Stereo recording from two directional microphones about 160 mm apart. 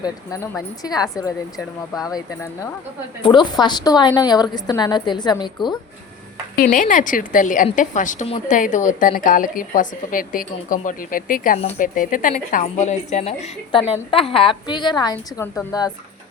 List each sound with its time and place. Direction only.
0.0 s a woman's voice: 20° left (ahead or behind)
6.6 s a woman's voice: 55° left (ahead or behind); by 15.4 s 25° left (ahead or behind)